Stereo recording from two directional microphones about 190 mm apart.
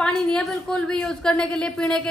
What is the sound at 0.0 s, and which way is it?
A woman's voice, 5° left (ahead or behind).